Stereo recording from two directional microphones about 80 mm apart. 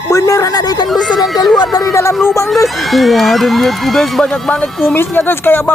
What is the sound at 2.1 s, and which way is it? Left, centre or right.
Speech, centre.